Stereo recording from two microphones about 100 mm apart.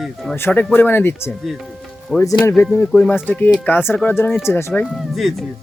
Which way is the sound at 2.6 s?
20° left (ahead or behind).